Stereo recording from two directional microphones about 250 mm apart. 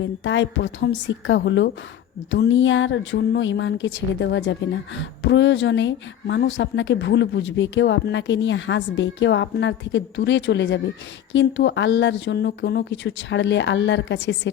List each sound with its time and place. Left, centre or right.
0.0 s speech: left